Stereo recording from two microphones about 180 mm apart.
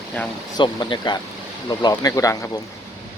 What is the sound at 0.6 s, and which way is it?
Speech, 25° left (ahead or behind).